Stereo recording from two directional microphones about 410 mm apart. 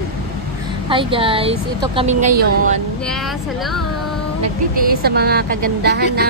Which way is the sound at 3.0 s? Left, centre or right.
Centre.